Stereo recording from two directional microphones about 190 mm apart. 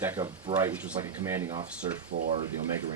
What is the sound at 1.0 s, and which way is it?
Speech, 15° right (ahead or behind).